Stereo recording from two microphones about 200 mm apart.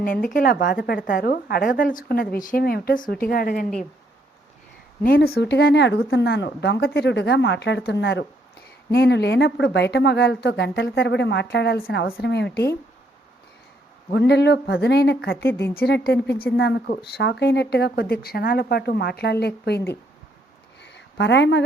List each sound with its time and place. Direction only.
0.3 s a woman's voice: 45° left (ahead or behind)
5.0 s speech: 50° left (ahead or behind)
14.1 s speech: 55° left (ahead or behind)
15.4 s speech: 10° left (ahead or behind)
15.7 s a woman's voice: 50° left (ahead or behind)
20.8 s a sound: 60° left (ahead or behind)